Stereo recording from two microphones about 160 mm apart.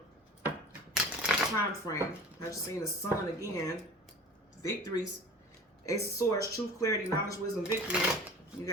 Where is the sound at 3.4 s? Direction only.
20° left (ahead or behind).